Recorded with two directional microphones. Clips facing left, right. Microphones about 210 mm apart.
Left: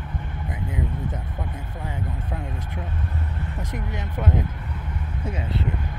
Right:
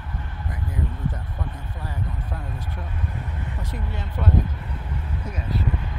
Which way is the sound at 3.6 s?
15° left (ahead or behind).